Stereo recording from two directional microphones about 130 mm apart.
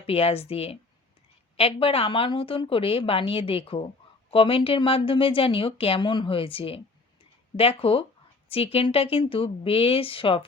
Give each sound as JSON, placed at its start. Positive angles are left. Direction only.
{"t": 0.0, "sound": "speech", "side_deg": 50}